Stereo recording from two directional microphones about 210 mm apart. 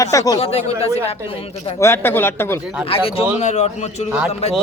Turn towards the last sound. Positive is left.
turn(degrees=30)  # may be behind; listen again after turning